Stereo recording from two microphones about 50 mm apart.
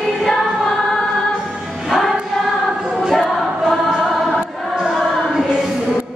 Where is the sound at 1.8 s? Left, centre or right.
Centre.